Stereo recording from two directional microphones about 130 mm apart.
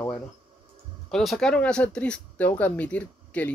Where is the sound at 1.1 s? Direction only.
Centre (ahead or behind).